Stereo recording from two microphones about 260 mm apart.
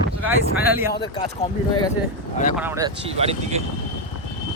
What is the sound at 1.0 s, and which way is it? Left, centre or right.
Speech, centre.